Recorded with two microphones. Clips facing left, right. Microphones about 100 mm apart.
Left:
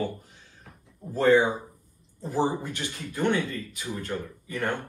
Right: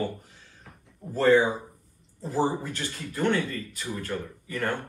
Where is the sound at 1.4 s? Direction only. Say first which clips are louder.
Even; centre (ahead or behind).